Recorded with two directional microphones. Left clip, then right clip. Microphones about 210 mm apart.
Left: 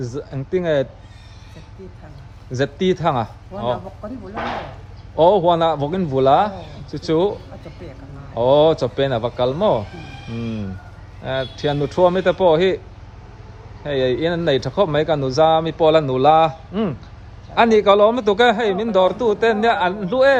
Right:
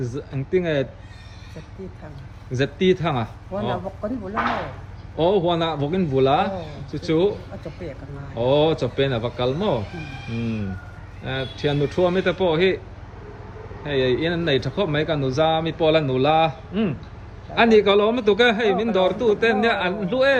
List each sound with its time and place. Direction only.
0.0 s speech: 10° left (ahead or behind)
2.5 s speech: 10° left (ahead or behind)
5.2 s speech: 10° left (ahead or behind)
8.4 s speech: 10° left (ahead or behind)
9.5 s speech: 40° left (ahead or behind)
11.2 s speech: 10° left (ahead or behind)
13.8 s speech: 10° left (ahead or behind)